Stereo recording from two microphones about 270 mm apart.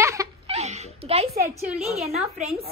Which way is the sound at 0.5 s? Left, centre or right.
Right.